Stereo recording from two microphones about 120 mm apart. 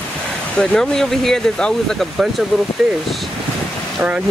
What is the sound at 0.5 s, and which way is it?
Speech, 5° left (ahead or behind).